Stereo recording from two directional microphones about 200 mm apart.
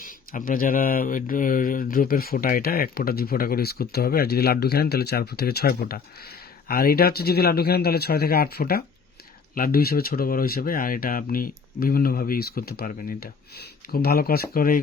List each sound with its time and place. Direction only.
0.0 s speech: 45° left (ahead or behind)